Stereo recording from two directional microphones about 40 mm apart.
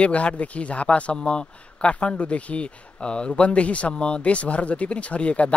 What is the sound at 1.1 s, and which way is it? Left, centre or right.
Speech, left.